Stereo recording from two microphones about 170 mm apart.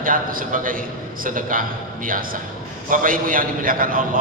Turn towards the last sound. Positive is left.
turn(degrees=-55)  # may be behind; listen again after turning